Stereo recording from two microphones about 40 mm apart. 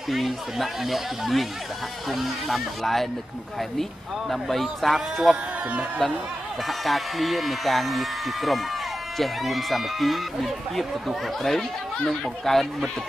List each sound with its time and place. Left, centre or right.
0.1 s speech: centre
4.3 s speech: centre
5.7 s speech: right
6.7 s speech: centre